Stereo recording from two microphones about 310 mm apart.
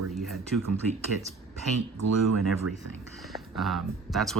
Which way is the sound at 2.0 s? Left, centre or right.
Right.